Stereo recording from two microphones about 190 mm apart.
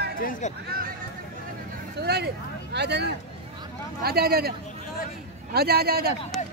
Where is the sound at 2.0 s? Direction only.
60° right (ahead or behind).